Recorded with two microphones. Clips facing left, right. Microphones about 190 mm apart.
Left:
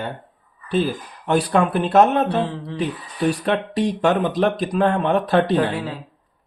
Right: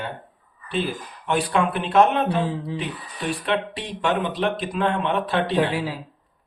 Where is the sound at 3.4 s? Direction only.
40° left (ahead or behind).